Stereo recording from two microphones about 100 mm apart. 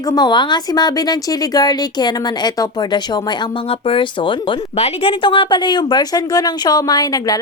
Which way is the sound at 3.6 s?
65° left (ahead or behind).